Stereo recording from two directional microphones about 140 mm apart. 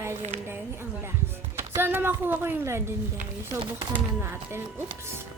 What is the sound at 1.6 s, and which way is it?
Speech, 15° right (ahead or behind).